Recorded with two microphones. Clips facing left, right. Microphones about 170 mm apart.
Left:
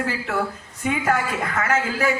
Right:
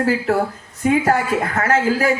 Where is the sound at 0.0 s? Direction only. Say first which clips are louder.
Right 7 dB; 35° right (ahead or behind).